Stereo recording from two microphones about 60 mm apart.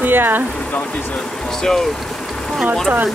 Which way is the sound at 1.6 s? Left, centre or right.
Centre.